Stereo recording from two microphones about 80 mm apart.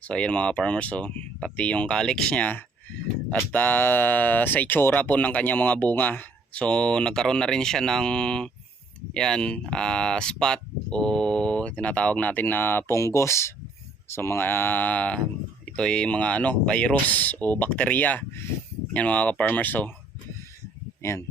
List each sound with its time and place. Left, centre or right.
0.1 s speech: centre
21.0 s speech: left